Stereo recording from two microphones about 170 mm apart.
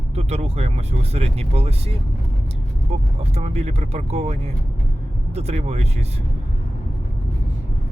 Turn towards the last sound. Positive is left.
turn(degrees=-40)  # may be behind; listen again after turning